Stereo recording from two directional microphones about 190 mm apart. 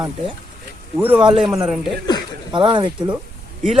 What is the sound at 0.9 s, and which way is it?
Speech, 10° right (ahead or behind).